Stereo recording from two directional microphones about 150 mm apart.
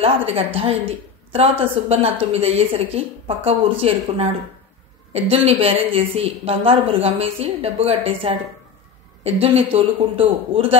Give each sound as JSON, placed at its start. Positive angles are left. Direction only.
{"t": 0.0, "sound": "a woman's voice", "side_deg": -40}
{"t": 5.1, "sound": "a woman's voice", "side_deg": -40}